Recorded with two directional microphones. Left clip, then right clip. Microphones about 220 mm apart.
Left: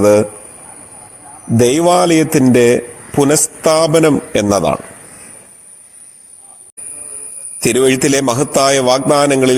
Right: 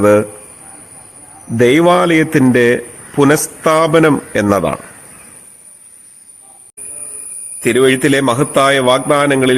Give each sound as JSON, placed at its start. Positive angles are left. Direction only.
{"t": 0.0, "sound": "a man's voice", "side_deg": 15}
{"t": 1.5, "sound": "a man's voice", "side_deg": 15}
{"t": 7.6, "sound": "a man's voice", "side_deg": 20}